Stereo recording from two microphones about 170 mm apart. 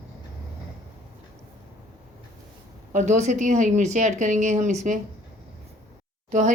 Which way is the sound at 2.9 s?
45° right (ahead or behind).